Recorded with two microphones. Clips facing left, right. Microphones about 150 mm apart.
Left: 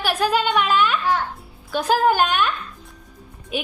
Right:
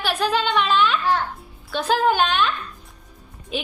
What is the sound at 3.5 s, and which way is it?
Speech, 10° left (ahead or behind).